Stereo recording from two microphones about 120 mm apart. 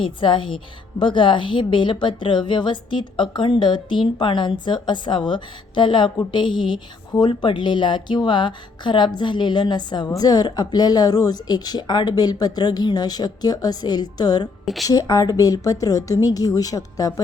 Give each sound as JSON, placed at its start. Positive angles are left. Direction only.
{"t": 0.0, "sound": "a woman's voice", "side_deg": 45}
{"t": 14.6, "sound": "a sound", "side_deg": 0}
{"t": 14.8, "sound": "a woman's voice", "side_deg": 30}